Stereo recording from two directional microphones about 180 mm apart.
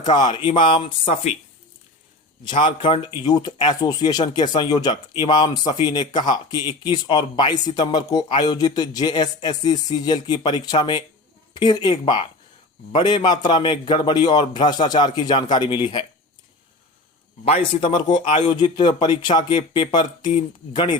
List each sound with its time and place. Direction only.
0.0 s speech: 25° left (ahead or behind)
2.4 s speech: 25° left (ahead or behind)
17.4 s speech: 30° left (ahead or behind)